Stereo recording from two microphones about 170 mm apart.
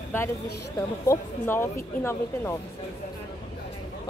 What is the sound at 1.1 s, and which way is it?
Speech, 15° left (ahead or behind).